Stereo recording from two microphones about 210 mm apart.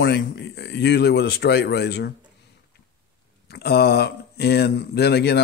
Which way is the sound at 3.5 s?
50° left (ahead or behind).